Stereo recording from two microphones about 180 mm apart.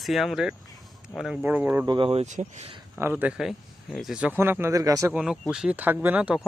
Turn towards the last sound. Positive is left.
turn(degrees=-5)  # may be behind; listen again after turning